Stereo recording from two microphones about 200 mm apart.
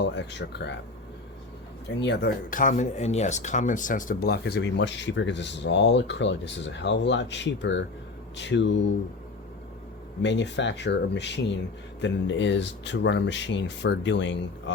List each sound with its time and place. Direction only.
0.0 s speech: 60° left (ahead or behind)
2.0 s speech: 60° left (ahead or behind)
2.5 s speech: 40° left (ahead or behind); by 8.9 s 60° left (ahead or behind)
10.2 s speech: 60° left (ahead or behind)